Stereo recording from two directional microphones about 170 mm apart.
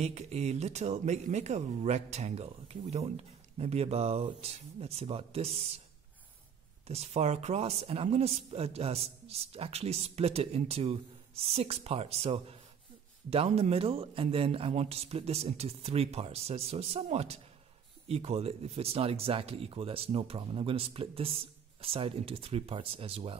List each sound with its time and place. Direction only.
0.0 s speech: 40° right (ahead or behind)
6.9 s speech: 40° right (ahead or behind)